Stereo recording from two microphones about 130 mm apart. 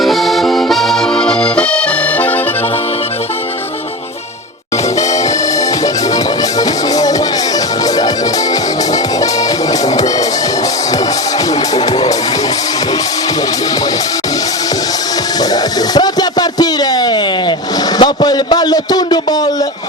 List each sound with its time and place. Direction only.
0.0 s accordion: centre (ahead or behind)
6.6 s music: 30° left (ahead or behind)
11.7 s music: 30° left (ahead or behind)
16.0 s a sound: 30° left (ahead or behind)